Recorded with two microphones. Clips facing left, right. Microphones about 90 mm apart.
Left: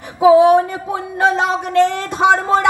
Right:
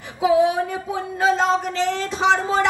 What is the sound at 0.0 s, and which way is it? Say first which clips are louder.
Speech: left 8 dB; 60° left (ahead or behind).